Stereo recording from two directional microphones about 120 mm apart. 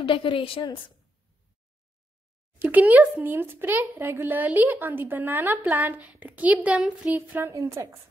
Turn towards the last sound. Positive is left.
turn(degrees=-25)  # may be behind; listen again after turning